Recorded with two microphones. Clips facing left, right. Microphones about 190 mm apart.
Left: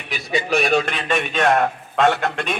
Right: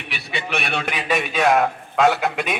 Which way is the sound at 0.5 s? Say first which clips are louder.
Left 8 dB; 40° left (ahead or behind).